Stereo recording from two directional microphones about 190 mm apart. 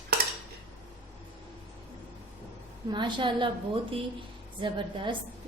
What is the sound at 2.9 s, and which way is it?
A woman's voice, 25° right (ahead or behind).